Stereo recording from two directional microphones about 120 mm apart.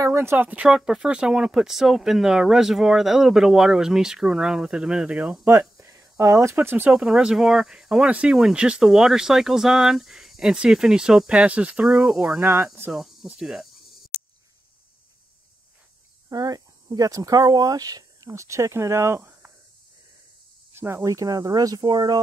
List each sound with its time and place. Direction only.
0.0 s speech: 20° right (ahead or behind); by 5.4 s 5° right (ahead or behind)
5.4 s speech: 25° right (ahead or behind)
6.9 s speech: 5° right (ahead or behind)
16.3 s speech: 30° right (ahead or behind)
20.7 s speech: 20° right (ahead or behind)